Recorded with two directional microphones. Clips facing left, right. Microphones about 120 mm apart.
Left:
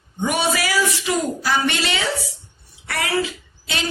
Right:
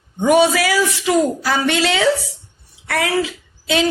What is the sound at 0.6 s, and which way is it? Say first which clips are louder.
A woman's voice: right 4 dB; 90° right.